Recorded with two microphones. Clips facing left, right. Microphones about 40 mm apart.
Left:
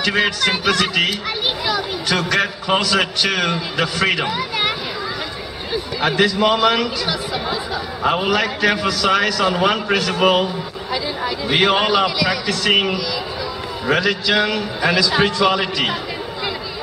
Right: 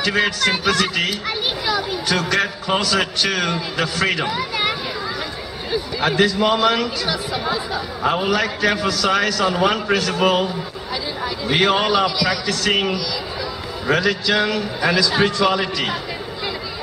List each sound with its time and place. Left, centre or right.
0.0 s a man's voice: centre